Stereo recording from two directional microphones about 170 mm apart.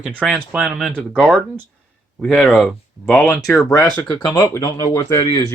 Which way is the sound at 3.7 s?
20° left (ahead or behind).